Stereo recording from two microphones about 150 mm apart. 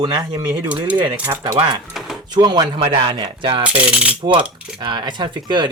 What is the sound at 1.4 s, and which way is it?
Speech, 20° right (ahead or behind).